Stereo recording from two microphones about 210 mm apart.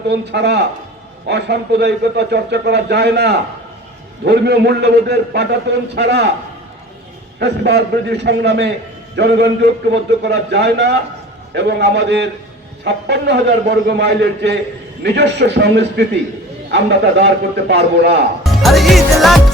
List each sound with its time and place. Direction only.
0.1 s a man's voice: 50° right (ahead or behind)
7.3 s a man's voice: 50° right (ahead or behind)
18.4 s music: centre (ahead or behind)